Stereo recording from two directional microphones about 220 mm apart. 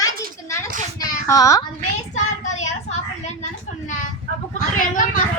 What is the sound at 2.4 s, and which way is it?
Child singing, 30° left (ahead or behind).